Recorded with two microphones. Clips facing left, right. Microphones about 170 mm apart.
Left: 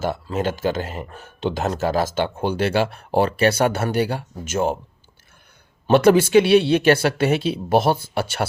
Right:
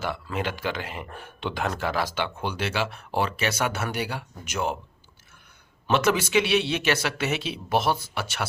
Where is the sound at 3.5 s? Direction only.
30° left (ahead or behind).